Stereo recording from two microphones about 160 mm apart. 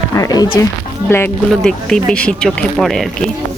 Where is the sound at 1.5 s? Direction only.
5° left (ahead or behind).